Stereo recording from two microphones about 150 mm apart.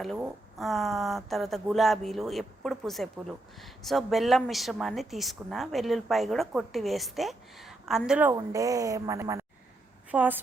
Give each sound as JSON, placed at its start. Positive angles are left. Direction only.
{"t": 0.6, "sound": "speech", "side_deg": 0}
{"t": 8.3, "sound": "a woman's voice", "side_deg": -25}